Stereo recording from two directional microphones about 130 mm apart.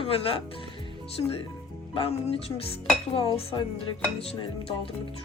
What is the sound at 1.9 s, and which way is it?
Speech, 45° left (ahead or behind).